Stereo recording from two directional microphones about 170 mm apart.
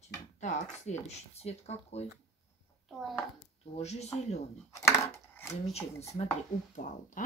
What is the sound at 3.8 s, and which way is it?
Speech, 40° left (ahead or behind).